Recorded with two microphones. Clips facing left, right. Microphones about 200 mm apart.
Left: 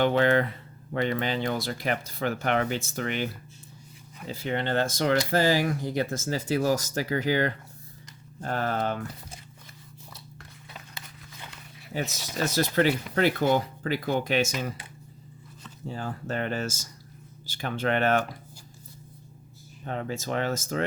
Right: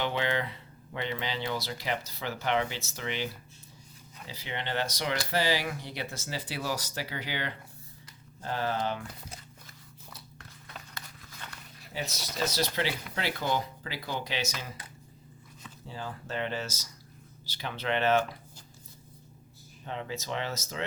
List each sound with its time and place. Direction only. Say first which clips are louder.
0.0 s speech: left 8 dB; 50° left (ahead or behind)
4.3 s speech: left 8 dB; 50° left (ahead or behind)
12.5 s speech: left 9 dB; 50° left (ahead or behind)
15.9 s speech: left 5 dB; 50° left (ahead or behind)
19.8 s speech: left 5 dB; 45° left (ahead or behind)